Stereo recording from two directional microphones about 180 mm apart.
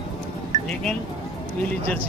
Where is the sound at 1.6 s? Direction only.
10° left (ahead or behind).